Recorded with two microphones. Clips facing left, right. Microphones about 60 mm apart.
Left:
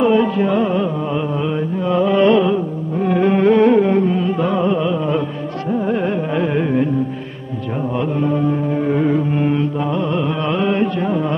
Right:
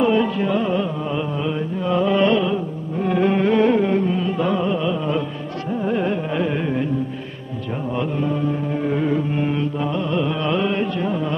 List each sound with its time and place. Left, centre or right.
0.0 s music: centre
5.8 s carnatic music: left
8.7 s music: left
9.9 s carnatic music: left